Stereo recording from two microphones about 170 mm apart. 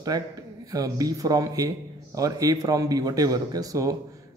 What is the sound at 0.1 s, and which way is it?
A man's voice, 25° right (ahead or behind).